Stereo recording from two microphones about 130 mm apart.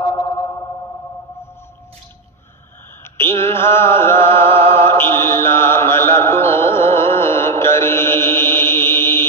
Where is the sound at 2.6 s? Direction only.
20° left (ahead or behind).